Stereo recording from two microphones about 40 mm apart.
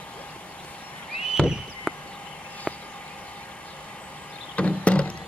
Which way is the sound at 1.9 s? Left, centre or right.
Centre.